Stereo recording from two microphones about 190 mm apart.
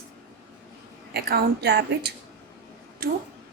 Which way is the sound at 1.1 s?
55° right (ahead or behind).